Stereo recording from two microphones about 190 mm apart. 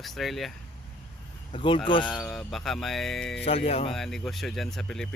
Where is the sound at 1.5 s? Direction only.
25° left (ahead or behind).